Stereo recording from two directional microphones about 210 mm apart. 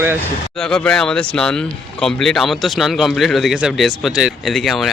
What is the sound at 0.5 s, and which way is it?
Speech, 5° left (ahead or behind).